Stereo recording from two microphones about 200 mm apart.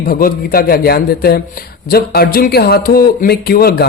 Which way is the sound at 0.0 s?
45° left (ahead or behind).